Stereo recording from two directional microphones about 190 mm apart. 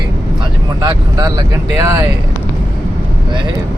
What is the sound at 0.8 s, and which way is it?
Speech, 20° right (ahead or behind).